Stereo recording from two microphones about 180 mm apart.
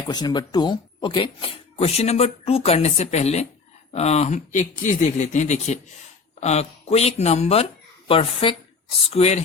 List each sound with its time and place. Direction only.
0.1 s speech: 25° left (ahead or behind)